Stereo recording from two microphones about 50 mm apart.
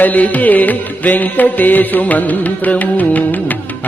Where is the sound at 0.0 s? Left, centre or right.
Left.